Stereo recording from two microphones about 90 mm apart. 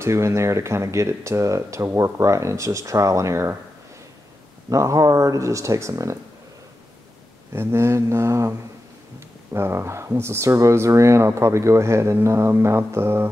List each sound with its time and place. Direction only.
0.0 s speech: 30° right (ahead or behind)
4.6 s speech: 35° right (ahead or behind)
7.5 s speech: 30° right (ahead or behind)
9.5 s speech: 30° right (ahead or behind)